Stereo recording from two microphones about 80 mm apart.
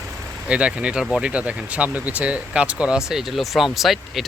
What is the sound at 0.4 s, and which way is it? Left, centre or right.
Speech, centre.